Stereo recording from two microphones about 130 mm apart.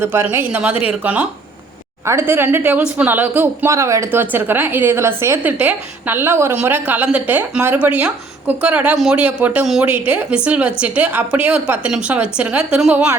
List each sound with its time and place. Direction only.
0.0 s a woman's voice: 15° right (ahead or behind)